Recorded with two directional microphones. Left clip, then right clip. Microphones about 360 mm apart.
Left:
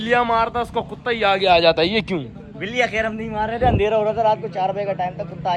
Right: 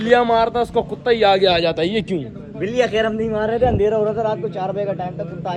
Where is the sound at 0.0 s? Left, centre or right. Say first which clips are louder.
Right 3 dB; centre.